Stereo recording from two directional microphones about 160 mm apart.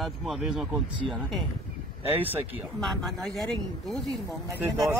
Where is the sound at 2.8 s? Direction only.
Centre (ahead or behind).